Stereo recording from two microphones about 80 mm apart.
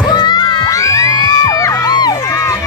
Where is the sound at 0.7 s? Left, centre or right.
Left.